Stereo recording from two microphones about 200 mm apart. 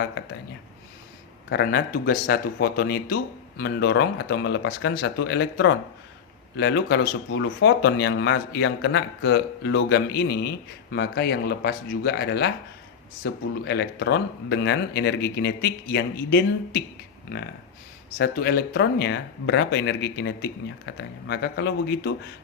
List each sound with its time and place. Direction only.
1.5 s speech: 55° left (ahead or behind)